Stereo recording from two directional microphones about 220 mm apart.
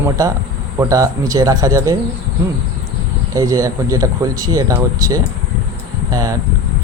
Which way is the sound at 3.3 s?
15° right (ahead or behind).